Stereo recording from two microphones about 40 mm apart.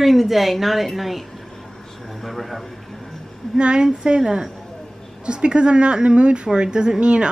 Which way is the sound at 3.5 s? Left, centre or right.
Right.